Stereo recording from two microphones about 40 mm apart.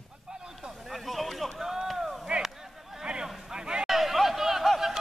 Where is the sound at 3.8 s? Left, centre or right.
Centre.